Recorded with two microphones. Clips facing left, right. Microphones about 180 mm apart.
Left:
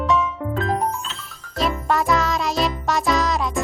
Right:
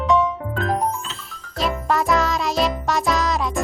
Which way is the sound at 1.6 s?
Centre (ahead or behind).